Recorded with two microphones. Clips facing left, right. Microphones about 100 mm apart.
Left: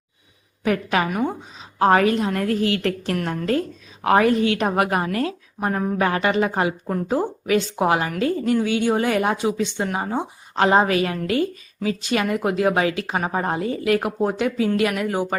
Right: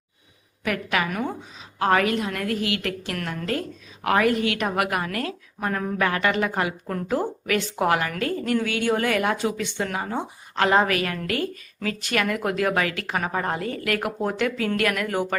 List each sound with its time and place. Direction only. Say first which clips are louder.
0.6 s a woman's voice: left 4 dB; 30° left (ahead or behind)
1.1 s a woman's voice: left 4 dB; 20° left (ahead or behind)
1.8 s a woman's voice: left 4 dB; 30° left (ahead or behind)